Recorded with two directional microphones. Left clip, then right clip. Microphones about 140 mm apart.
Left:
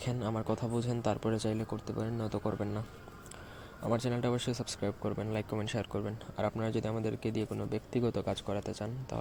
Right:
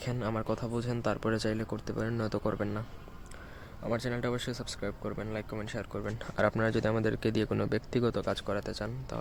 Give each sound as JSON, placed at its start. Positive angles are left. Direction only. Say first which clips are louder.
{"t": 0.0, "sound": "speech", "louder": "right 2 dB", "side_deg": -10}
{"t": 3.8, "sound": "speech", "louder": "even", "side_deg": 0}
{"t": 6.3, "sound": "speech", "louder": "right 6 dB", "side_deg": -30}
{"t": 7.9, "sound": "speech", "louder": "right 1 dB", "side_deg": -15}